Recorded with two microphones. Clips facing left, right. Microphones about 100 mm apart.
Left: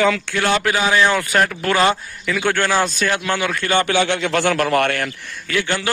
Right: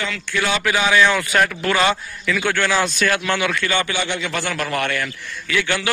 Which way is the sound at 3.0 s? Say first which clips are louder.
Even; 20° left (ahead or behind).